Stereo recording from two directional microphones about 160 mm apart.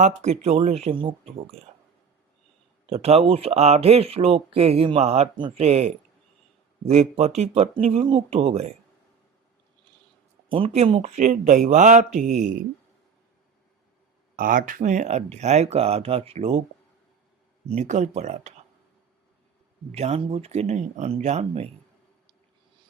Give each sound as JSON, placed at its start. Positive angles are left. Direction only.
{"t": 0.0, "sound": "speech", "side_deg": -45}
{"t": 2.8, "sound": "speech", "side_deg": -40}
{"t": 10.5, "sound": "speech", "side_deg": -40}
{"t": 14.3, "sound": "speech", "side_deg": -60}
{"t": 17.7, "sound": "speech", "side_deg": -45}
{"t": 19.9, "sound": "speech", "side_deg": -40}